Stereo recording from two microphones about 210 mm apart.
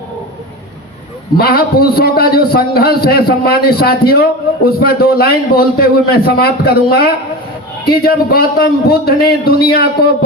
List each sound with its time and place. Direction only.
1.4 s a man's voice: 45° left (ahead or behind)